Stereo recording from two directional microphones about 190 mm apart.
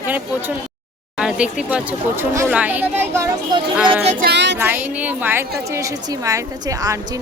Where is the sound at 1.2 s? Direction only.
5° right (ahead or behind).